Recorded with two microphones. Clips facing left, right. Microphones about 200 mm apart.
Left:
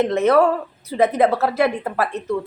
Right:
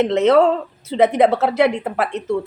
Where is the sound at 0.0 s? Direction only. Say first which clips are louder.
Right 2 dB; 20° right (ahead or behind).